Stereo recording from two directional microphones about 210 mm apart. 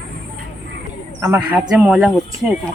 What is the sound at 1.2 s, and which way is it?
Speech, 15° right (ahead or behind).